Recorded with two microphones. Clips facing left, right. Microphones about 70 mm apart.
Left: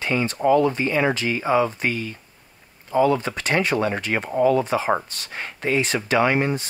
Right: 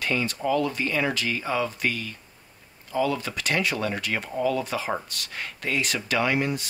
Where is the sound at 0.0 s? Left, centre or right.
Left.